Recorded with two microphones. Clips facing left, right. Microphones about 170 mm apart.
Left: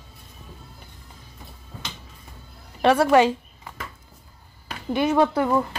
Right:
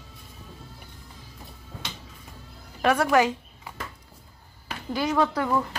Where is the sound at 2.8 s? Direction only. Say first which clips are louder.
Left 4 dB; 30° left (ahead or behind).